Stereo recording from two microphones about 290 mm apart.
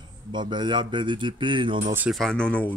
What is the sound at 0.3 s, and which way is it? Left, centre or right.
A man's voice, centre.